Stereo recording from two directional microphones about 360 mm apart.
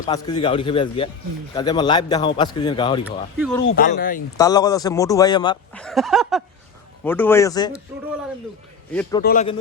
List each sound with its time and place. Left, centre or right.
0.1 s speech: centre
3.0 s speech: centre
3.7 s speech: left
4.4 s speech: centre
8.9 s speech: centre
9.2 s speech: left